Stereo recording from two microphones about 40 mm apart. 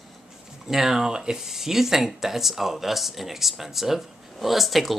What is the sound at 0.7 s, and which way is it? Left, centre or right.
Speech, centre.